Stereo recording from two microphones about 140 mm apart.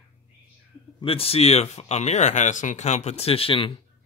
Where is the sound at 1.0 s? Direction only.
40° left (ahead or behind).